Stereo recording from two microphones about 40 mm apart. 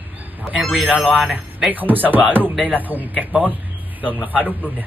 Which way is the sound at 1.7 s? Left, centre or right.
Right.